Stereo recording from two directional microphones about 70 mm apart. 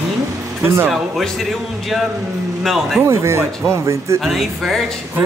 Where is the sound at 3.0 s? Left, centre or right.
Right.